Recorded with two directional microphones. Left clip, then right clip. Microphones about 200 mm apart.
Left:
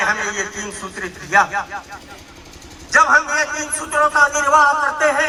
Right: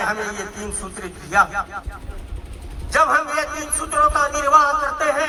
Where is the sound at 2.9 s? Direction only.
40° right (ahead or behind).